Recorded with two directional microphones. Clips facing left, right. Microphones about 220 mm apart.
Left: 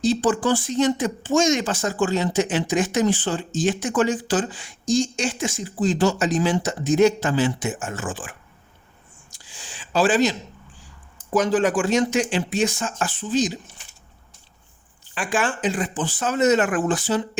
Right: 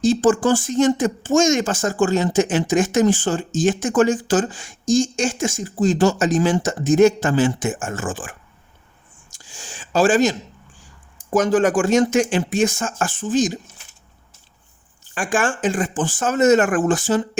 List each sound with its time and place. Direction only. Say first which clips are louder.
0.0 s speech: right 4 dB; 45° right (ahead or behind)
9.3 s a sound: right 4 dB; 45° right (ahead or behind)
11.3 s speech: right 3 dB; 45° right (ahead or behind)
15.0 s speech: right 3 dB; 45° right (ahead or behind)